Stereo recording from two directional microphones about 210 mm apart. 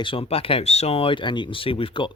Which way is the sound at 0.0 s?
25° left (ahead or behind).